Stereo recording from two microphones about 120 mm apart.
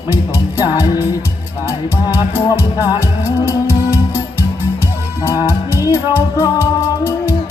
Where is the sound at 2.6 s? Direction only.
20° left (ahead or behind).